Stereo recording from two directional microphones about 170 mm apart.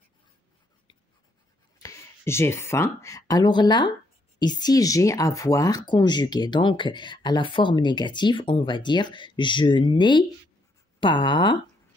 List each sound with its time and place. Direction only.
1.8 s speech: 15° left (ahead or behind)